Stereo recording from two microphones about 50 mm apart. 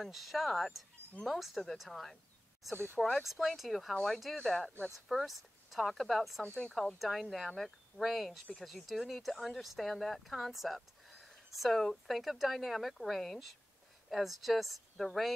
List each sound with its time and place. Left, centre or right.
0.0 s speech: centre
2.7 s speech: right
3.2 s speech: centre
3.9 s speech: centre
4.9 s speech: centre
6.4 s speech: left
7.0 s speech: centre